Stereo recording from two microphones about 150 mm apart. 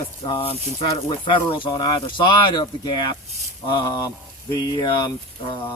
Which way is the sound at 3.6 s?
30° left (ahead or behind).